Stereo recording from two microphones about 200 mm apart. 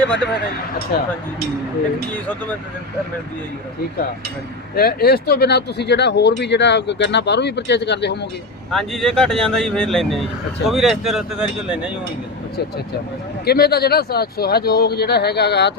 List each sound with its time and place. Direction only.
0.9 s speech: 50° left (ahead or behind)
4.7 s speech: 50° left (ahead or behind)
8.7 s speech: centre (ahead or behind)
13.4 s speech: 50° left (ahead or behind)